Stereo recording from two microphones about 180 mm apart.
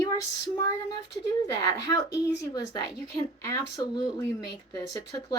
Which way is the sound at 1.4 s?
20° left (ahead or behind).